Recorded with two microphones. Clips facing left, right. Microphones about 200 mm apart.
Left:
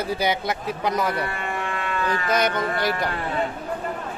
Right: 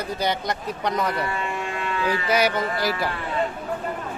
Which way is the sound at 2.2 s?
10° right (ahead or behind).